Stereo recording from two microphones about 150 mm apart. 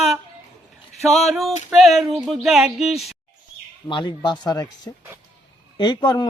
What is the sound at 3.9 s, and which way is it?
Speech, 30° left (ahead or behind).